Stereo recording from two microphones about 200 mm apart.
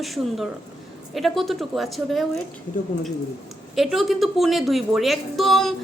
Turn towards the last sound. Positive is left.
turn(degrees=0)  # may be behind; listen again after turning